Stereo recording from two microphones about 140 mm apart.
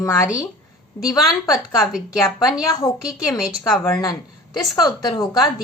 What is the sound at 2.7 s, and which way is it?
Speech, 25° left (ahead or behind).